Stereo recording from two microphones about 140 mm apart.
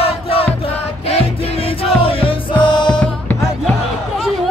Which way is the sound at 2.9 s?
5° left (ahead or behind).